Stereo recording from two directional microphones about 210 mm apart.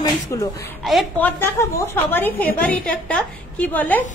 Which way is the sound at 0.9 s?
5° left (ahead or behind).